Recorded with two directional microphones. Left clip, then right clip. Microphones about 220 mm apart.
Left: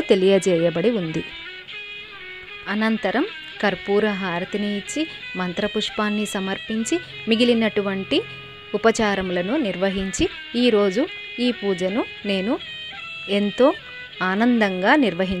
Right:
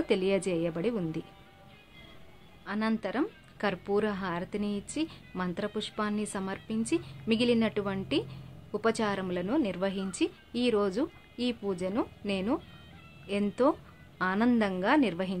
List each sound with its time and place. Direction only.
0.1 s speech: 30° left (ahead or behind)
2.7 s speech: 30° left (ahead or behind)